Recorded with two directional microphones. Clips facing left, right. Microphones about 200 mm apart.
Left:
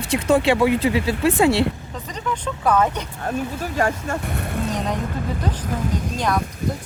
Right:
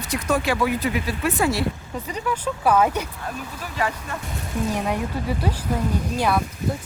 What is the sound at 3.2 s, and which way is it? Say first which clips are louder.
Speech: left 7 dB; 45° left (ahead or behind).